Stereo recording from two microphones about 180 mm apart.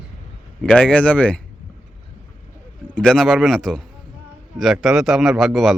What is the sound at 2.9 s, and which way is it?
A man's voice, 5° left (ahead or behind).